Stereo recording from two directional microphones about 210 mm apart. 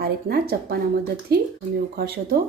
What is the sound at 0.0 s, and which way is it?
Speech, 45° right (ahead or behind).